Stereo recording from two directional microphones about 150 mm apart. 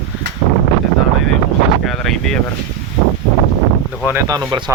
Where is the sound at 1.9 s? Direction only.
5° left (ahead or behind).